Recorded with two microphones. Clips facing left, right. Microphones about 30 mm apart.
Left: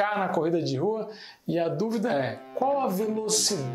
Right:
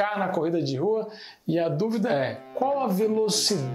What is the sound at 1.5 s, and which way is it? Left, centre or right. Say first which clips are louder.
Speech: right 2 dB; right.